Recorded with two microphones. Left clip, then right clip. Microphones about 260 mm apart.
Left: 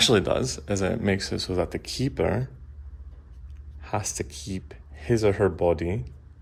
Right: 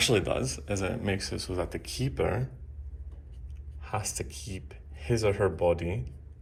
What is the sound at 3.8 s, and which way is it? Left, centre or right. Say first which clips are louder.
Speech: left 5 dB; left.